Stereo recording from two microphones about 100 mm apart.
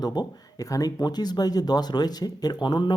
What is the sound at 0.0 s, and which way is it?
Speech, 45° left (ahead or behind).